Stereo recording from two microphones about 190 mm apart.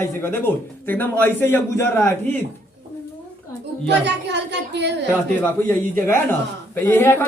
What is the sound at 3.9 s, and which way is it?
A woman's voice, 65° right (ahead or behind).